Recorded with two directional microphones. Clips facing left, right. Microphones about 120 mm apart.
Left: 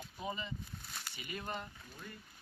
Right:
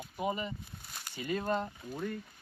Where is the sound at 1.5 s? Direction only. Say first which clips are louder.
Right 10 dB; 65° right (ahead or behind).